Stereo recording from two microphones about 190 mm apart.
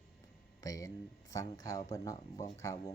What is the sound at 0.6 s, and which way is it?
Speech, 20° left (ahead or behind).